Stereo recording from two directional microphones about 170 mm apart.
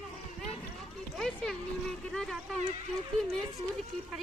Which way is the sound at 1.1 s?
5° left (ahead or behind).